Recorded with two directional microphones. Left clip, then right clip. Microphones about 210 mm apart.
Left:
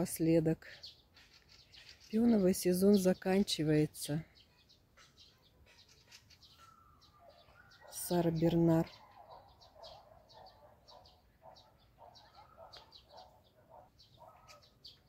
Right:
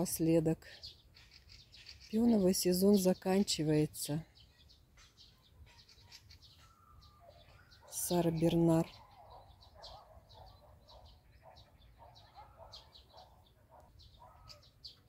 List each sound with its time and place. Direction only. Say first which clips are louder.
0.0 s speech: even; centre (ahead or behind)
2.0 s speech: even; 5° right (ahead or behind)
7.9 s speech: even; centre (ahead or behind)
11.4 s a sound: left 2 dB; 20° right (ahead or behind)